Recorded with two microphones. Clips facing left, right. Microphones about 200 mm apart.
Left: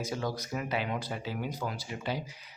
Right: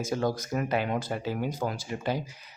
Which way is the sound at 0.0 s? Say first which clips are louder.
Right 6 dB; 50° right (ahead or behind).